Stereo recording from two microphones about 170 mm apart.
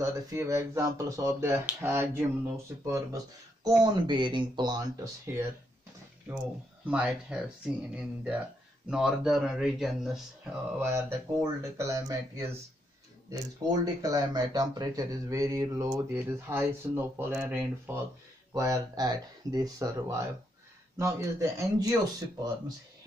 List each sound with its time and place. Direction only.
0.0 s speech: 15° right (ahead or behind)
6.9 s speech: 5° right (ahead or behind)
10.8 s speech: 15° right (ahead or behind)